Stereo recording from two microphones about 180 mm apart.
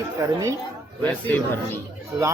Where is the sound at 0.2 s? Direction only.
15° right (ahead or behind).